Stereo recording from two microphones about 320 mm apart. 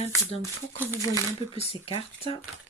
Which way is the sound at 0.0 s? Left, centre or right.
Centre.